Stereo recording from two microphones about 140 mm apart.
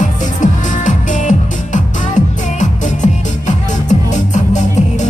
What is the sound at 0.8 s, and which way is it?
Music, 60° left (ahead or behind).